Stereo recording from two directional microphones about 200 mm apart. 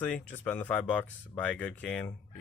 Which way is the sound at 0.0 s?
10° left (ahead or behind).